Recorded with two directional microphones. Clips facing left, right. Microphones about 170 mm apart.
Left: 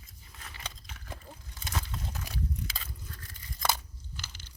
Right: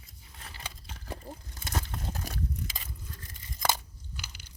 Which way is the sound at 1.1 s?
40° right (ahead or behind).